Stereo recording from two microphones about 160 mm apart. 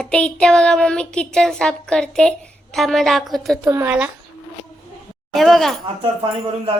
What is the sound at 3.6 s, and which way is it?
Speech, 15° right (ahead or behind).